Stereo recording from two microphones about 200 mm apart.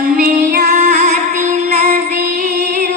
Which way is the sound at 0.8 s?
35° right (ahead or behind).